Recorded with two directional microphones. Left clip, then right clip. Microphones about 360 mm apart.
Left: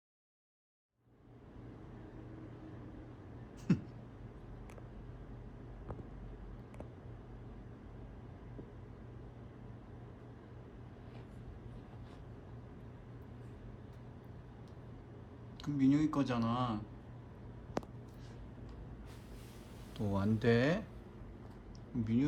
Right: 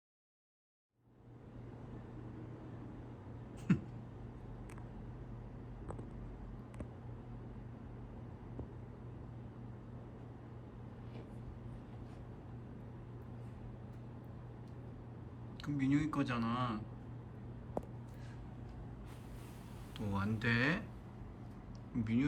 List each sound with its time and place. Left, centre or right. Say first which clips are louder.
3.7 s a sound: left 1 dB; centre
15.6 s speech: left 4 dB; centre
20.1 s speech: left 4 dB; centre
22.0 s speech: left 2 dB; centre